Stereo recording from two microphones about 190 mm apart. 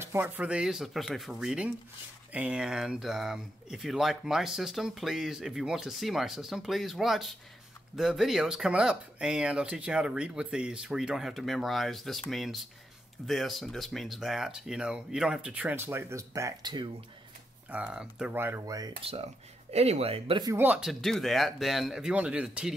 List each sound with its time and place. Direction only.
0.0 s speech: 10° right (ahead or behind)
17.6 s speech: 10° right (ahead or behind)
18.9 s speech: 30° right (ahead or behind)
20.5 s speech: 10° right (ahead or behind)